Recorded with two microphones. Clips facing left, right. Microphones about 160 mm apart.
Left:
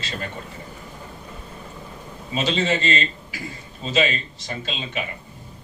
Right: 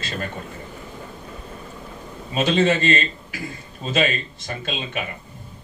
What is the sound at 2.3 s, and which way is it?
A man's voice, 55° right (ahead or behind).